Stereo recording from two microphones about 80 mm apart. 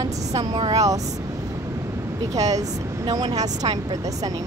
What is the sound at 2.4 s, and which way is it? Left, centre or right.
Speech, right.